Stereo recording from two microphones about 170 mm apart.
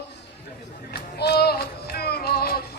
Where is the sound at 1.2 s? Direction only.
70° left (ahead or behind).